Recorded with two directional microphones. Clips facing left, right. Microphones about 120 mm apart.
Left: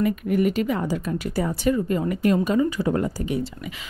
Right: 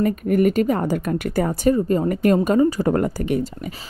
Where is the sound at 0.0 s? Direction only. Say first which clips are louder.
Right 3 dB; 45° right (ahead or behind).